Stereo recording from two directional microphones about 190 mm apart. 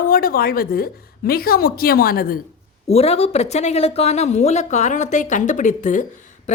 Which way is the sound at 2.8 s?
30° left (ahead or behind).